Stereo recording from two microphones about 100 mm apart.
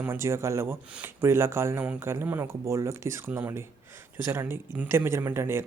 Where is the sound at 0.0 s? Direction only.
25° right (ahead or behind).